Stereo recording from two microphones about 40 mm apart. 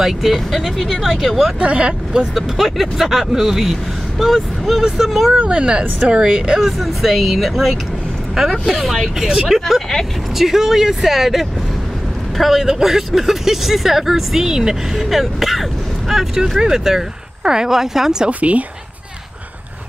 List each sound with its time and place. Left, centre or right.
0.0 s speech: centre
1.6 s speech: right
2.3 s speech: centre
5.5 s speech: right
6.6 s speech: centre
15.0 s speech: centre